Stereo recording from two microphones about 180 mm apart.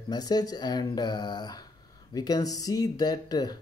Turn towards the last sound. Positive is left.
turn(degrees=20)  # may be behind; listen again after turning